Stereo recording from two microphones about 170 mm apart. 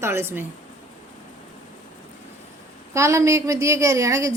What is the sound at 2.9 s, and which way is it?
A woman's voice, 15° right (ahead or behind).